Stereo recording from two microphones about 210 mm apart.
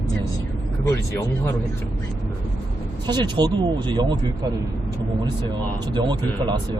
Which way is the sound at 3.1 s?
20° right (ahead or behind).